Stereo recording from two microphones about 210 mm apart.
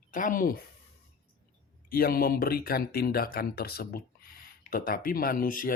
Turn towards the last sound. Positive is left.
turn(degrees=40)  # may be behind; listen again after turning